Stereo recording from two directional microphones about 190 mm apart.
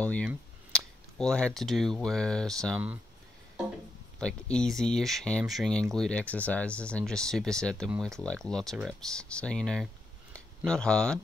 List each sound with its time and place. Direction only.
0.0 s speech: 5° left (ahead or behind)
4.2 s speech: 5° left (ahead or behind)